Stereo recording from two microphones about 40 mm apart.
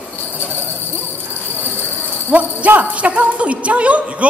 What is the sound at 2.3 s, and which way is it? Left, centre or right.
A woman's voice, right.